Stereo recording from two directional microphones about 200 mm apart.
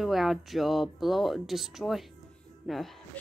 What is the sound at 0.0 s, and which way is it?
Speech, centre (ahead or behind).